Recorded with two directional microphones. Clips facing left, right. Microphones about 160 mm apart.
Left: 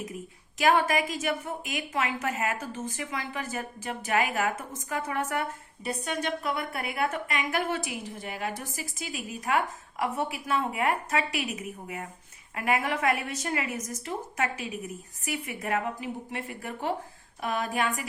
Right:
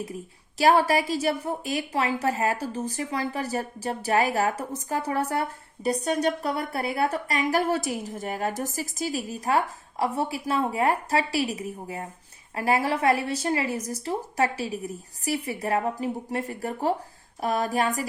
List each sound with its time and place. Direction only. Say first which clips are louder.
0.6 s a woman's voice: right 4 dB; 35° right (ahead or behind)